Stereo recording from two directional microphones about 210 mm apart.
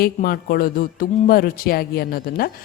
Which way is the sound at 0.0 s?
45° left (ahead or behind).